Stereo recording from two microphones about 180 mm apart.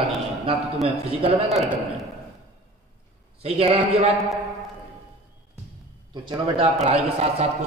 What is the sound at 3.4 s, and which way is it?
Speech, 30° right (ahead or behind).